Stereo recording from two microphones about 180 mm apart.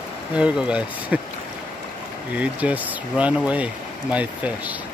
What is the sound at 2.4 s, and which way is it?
Speech, 10° right (ahead or behind).